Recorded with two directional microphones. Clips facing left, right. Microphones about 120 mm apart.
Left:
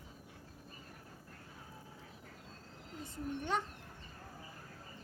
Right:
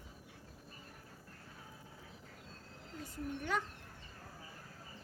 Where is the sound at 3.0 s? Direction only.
25° left (ahead or behind).